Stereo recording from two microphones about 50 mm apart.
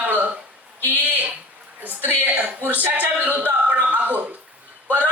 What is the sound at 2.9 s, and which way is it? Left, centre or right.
Speech, right.